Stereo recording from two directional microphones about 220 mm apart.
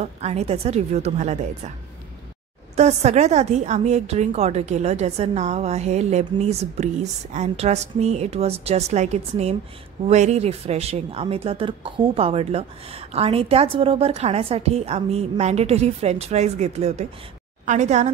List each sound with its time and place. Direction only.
0.0 s speech: 30° right (ahead or behind)
2.7 s a woman's voice: 30° right (ahead or behind)